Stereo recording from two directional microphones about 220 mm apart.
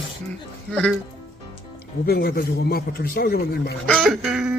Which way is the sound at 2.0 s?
45° left (ahead or behind).